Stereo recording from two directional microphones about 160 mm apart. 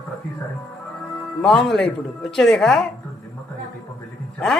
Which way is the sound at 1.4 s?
Centre (ahead or behind).